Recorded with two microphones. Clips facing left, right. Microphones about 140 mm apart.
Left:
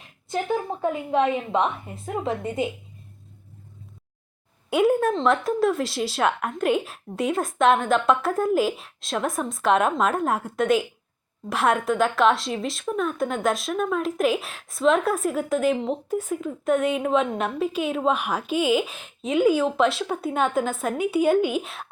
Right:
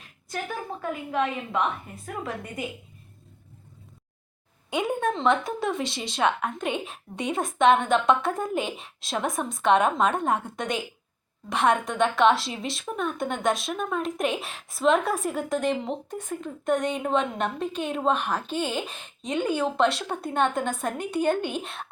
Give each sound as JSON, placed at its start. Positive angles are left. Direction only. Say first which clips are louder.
{"t": 0.3, "sound": "a woman's voice", "louder": "left 7 dB", "side_deg": 25}
{"t": 4.7, "sound": "a woman's voice", "louder": "left 6 dB", "side_deg": 5}